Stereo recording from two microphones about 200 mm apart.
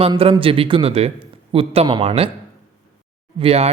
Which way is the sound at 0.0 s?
30° right (ahead or behind).